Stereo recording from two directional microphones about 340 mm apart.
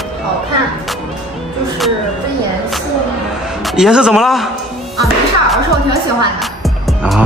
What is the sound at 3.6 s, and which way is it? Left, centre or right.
Speech, centre.